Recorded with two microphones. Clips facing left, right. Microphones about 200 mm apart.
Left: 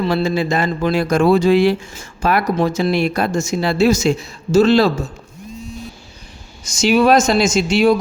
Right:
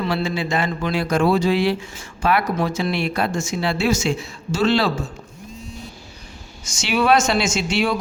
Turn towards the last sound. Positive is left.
turn(degrees=40)  # may be behind; listen again after turning